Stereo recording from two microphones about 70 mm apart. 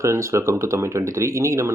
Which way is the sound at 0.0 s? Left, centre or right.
Right.